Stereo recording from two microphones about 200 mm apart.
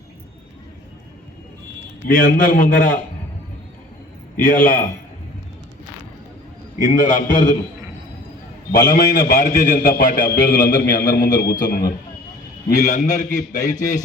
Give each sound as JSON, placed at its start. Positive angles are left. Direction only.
{"t": 2.1, "sound": "a man's voice", "side_deg": 45}
{"t": 4.4, "sound": "a man's voice", "side_deg": 45}
{"t": 6.8, "sound": "a man's voice", "side_deg": 40}
{"t": 8.7, "sound": "a man's voice", "side_deg": 40}